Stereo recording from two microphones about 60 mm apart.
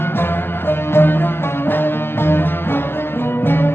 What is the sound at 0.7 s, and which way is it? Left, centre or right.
Music, left.